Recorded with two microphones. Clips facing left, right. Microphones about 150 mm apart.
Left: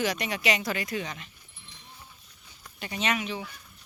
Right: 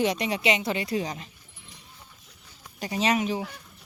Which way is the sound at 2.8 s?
35° right (ahead or behind).